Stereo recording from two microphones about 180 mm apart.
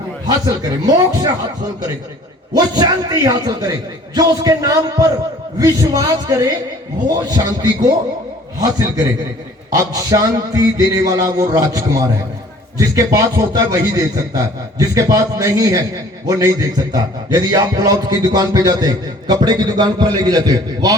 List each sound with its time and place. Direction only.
0.3 s a man's voice: 20° right (ahead or behind)
2.5 s a man's voice: 20° right (ahead or behind)
9.7 s a man's voice: 20° right (ahead or behind)